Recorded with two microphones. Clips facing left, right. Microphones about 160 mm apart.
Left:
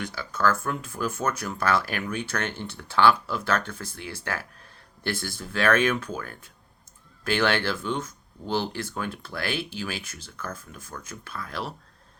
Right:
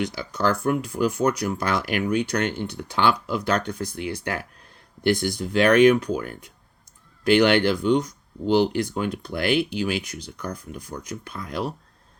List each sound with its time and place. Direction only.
0.0 s speech: 15° right (ahead or behind)